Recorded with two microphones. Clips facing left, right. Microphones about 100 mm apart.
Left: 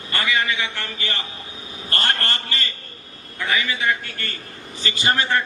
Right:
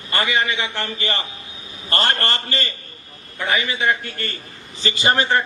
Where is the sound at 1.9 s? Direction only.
25° right (ahead or behind).